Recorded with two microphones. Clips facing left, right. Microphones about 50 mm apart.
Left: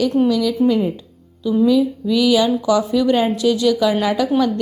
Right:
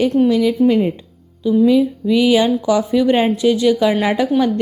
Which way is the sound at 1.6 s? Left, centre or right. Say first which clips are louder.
Right 1 dB; right.